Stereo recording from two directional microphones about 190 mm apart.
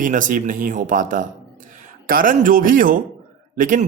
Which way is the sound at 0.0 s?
45° right (ahead or behind).